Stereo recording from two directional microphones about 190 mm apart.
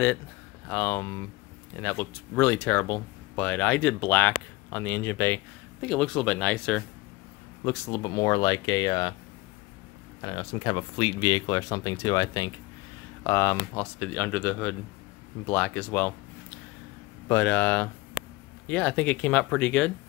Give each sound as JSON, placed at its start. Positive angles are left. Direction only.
{"t": 0.7, "sound": "speech", "side_deg": 10}
{"t": 7.9, "sound": "speech", "side_deg": 20}
{"t": 10.2, "sound": "speech", "side_deg": 25}